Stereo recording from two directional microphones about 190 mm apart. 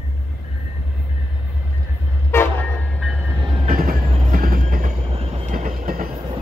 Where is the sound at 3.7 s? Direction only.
50° right (ahead or behind).